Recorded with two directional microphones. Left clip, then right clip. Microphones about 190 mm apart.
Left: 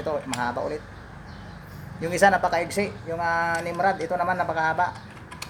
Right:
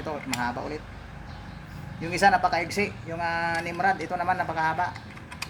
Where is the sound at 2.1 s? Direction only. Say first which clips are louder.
Left 1 dB; 10° left (ahead or behind).